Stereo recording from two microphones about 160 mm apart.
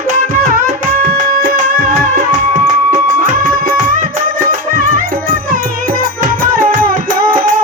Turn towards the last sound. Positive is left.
turn(degrees=-55)  # may be behind; listen again after turning